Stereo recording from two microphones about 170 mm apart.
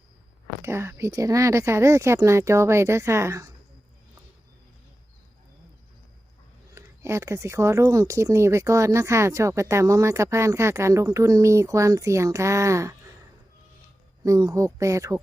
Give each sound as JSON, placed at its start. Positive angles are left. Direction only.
{"t": 0.6, "sound": "speech", "side_deg": -15}
{"t": 6.7, "sound": "speech", "side_deg": -15}
{"t": 14.3, "sound": "speech", "side_deg": -20}